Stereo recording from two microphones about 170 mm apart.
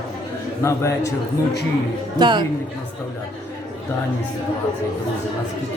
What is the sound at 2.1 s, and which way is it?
Speech, 25° right (ahead or behind).